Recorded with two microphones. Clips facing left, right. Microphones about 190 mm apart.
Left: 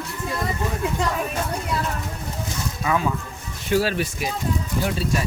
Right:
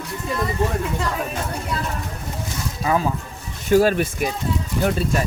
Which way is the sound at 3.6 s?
45° right (ahead or behind).